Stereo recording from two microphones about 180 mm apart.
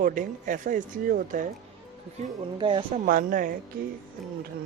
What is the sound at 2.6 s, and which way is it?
Speech, 30° right (ahead or behind).